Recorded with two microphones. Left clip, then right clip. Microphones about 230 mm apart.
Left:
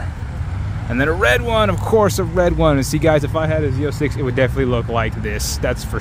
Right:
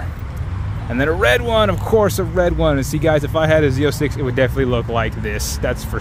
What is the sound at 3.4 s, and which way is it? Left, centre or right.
Speech, centre.